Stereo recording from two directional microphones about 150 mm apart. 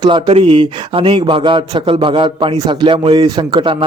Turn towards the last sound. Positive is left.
turn(degrees=-35)  # may be behind; listen again after turning